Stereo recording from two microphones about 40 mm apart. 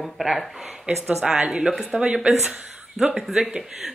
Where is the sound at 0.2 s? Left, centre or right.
Right.